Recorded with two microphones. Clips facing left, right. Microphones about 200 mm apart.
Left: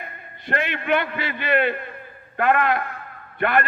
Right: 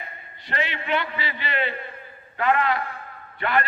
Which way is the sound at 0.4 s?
55° left (ahead or behind).